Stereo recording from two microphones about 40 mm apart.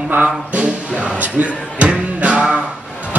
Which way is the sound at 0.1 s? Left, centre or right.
Right.